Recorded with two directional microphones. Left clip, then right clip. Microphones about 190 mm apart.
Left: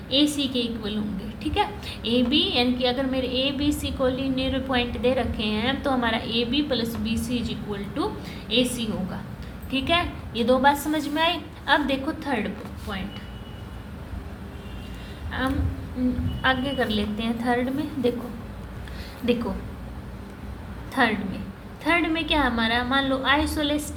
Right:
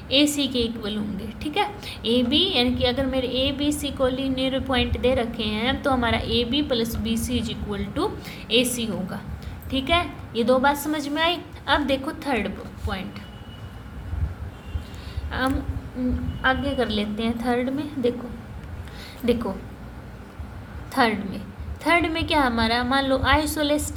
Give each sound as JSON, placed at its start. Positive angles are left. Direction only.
{"t": 0.1, "sound": "a woman's voice", "side_deg": -35}
{"t": 15.3, "sound": "a woman's voice", "side_deg": -30}
{"t": 20.9, "sound": "a woman's voice", "side_deg": -30}